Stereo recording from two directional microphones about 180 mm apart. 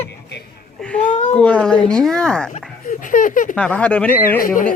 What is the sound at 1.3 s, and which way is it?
Speech, 5° left (ahead or behind).